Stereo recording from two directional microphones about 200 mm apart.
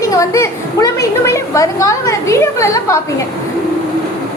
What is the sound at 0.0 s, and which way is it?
A woman's voice, 15° left (ahead or behind).